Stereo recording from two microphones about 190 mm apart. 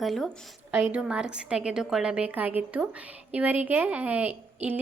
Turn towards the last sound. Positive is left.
turn(degrees=-10)  # may be behind; listen again after turning